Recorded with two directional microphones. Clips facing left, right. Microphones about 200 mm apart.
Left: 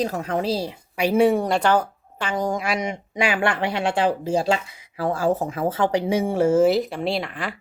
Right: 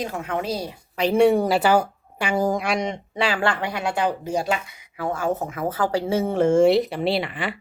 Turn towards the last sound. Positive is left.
turn(degrees=0)  # may be behind; listen again after turning